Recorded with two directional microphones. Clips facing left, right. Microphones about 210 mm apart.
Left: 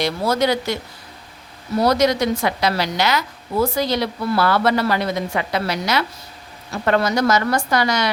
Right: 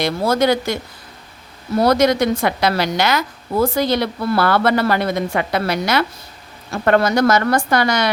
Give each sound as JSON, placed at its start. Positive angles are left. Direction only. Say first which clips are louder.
{"t": 0.0, "sound": "a woman's voice", "louder": "right 2 dB", "side_deg": -50}
{"t": 1.8, "sound": "a woman's voice", "louder": "right 2 dB", "side_deg": -55}